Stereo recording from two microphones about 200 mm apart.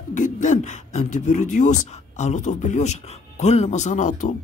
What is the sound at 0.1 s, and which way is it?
A man's voice, 40° left (ahead or behind).